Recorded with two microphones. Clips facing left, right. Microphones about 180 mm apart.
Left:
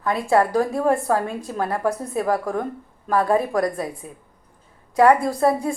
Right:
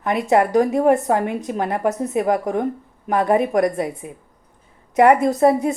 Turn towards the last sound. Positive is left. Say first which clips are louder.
# right 4 dB
turn(degrees=-20)  # may be behind; listen again after turning